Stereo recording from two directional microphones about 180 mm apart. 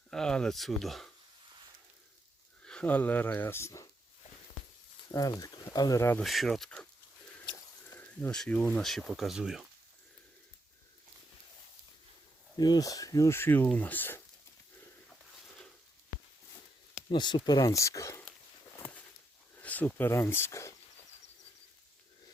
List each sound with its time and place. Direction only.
0.1 s speech: 5° left (ahead or behind)
2.6 s speech: 5° left (ahead or behind)
5.1 s speech: 20° left (ahead or behind)
6.2 s speech: centre (ahead or behind)
7.4 s speech: 20° left (ahead or behind); by 9.6 s centre (ahead or behind)
12.5 s speech: 20° left (ahead or behind)
17.1 s speech: 25° left (ahead or behind)
19.6 s speech: 10° left (ahead or behind)